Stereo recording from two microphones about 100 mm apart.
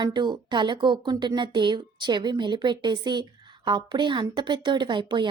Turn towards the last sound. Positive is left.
turn(degrees=-55)  # may be behind; listen again after turning